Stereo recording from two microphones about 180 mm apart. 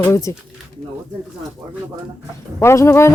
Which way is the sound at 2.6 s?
15° left (ahead or behind).